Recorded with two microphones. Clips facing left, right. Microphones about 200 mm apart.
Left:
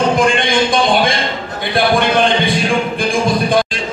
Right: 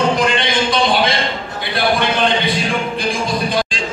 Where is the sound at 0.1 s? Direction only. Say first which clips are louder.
Left 3 dB; 50° left (ahead or behind).